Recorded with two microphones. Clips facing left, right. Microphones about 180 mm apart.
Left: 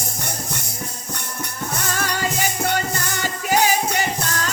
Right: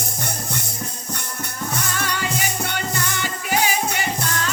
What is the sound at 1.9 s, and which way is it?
Music, 40° left (ahead or behind).